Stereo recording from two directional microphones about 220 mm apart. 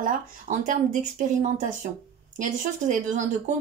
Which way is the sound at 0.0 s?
35° right (ahead or behind).